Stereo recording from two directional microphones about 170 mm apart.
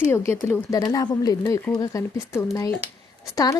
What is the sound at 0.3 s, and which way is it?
Speech, 15° left (ahead or behind).